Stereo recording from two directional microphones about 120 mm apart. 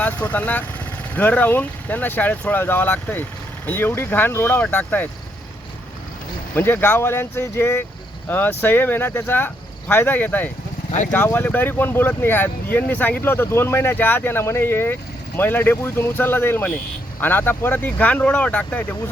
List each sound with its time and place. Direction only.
0.0 s speech: 15° left (ahead or behind)
6.5 s speech: 15° left (ahead or behind)